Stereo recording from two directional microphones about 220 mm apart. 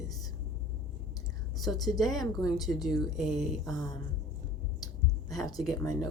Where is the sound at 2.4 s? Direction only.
15° left (ahead or behind).